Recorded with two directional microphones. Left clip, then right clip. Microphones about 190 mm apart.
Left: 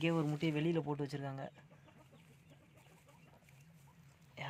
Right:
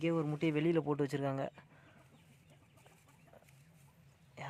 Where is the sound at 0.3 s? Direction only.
5° right (ahead or behind).